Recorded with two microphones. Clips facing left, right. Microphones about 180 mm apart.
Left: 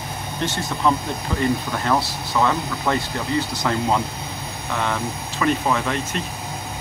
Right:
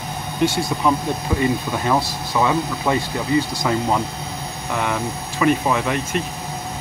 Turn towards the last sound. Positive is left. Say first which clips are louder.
# right 3 dB
turn(degrees=-10)  # may be behind; listen again after turning